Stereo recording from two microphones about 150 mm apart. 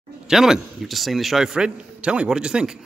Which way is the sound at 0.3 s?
5° right (ahead or behind).